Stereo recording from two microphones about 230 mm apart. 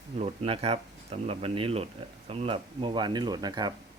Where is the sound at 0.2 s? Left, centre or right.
Right.